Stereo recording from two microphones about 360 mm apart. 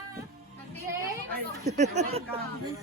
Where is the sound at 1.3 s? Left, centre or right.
Right.